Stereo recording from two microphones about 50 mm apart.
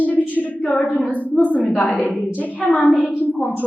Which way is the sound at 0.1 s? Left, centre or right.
Left.